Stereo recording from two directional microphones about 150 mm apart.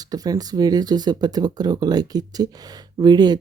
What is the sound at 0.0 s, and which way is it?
Speech, 25° right (ahead or behind).